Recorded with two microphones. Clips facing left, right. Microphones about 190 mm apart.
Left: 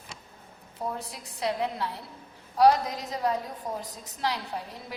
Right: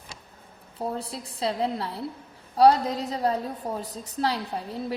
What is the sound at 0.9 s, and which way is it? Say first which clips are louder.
A woman's voice: right 5 dB; 30° right (ahead or behind).